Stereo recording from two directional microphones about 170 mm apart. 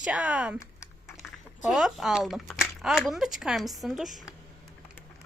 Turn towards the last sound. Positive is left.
turn(degrees=0)  # may be behind; listen again after turning